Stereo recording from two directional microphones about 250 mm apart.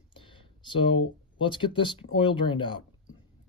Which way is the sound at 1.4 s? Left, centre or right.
Centre.